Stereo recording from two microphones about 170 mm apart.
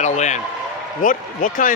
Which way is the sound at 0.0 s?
45° left (ahead or behind).